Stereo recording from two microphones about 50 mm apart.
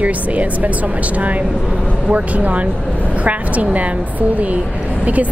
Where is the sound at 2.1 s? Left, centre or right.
Right.